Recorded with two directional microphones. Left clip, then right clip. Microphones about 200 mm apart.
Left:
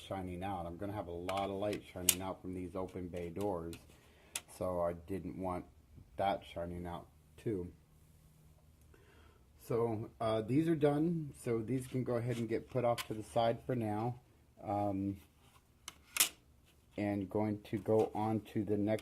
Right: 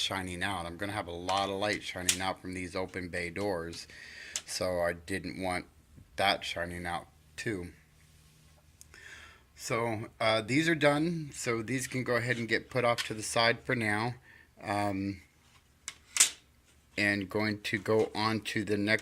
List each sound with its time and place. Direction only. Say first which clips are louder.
0.1 s speech: right 7 dB; 15° right (ahead or behind)
3.3 s speech: right 4 dB; 30° right (ahead or behind)
4.6 s speech: right 5 dB; 15° right (ahead or behind)
9.7 s speech: right 3 dB; 35° right (ahead or behind)
10.2 s speech: right 6 dB; 10° right (ahead or behind)
16.9 s speech: right 8 dB; centre (ahead or behind)